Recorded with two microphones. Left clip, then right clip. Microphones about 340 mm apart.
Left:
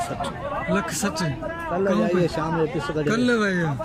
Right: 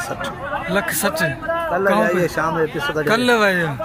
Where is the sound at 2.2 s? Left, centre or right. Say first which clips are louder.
Right 6 dB; right.